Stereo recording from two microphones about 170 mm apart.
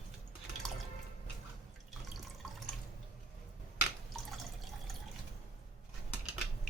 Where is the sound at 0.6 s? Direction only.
Centre (ahead or behind).